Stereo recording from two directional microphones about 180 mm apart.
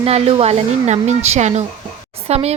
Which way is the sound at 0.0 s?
35° right (ahead or behind).